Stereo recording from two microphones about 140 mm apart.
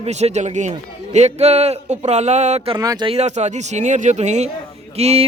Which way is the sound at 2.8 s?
25° right (ahead or behind).